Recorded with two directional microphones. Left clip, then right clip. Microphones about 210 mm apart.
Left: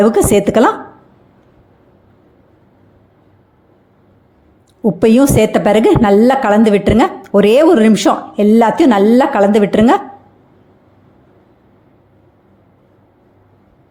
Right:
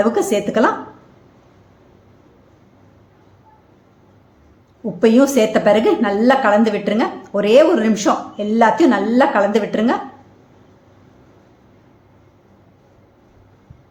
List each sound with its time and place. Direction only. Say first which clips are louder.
0.0 s a woman's voice: left 6 dB; 40° left (ahead or behind)
4.9 s a woman's voice: left 2 dB; 40° left (ahead or behind)